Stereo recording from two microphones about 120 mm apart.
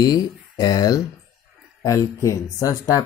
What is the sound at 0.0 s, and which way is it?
Speech, 30° left (ahead or behind).